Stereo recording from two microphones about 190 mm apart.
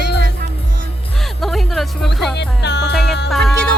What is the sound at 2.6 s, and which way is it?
Music, 65° left (ahead or behind).